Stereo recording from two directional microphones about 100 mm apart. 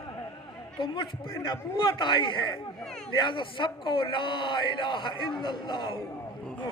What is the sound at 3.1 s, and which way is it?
Speech, 55° left (ahead or behind).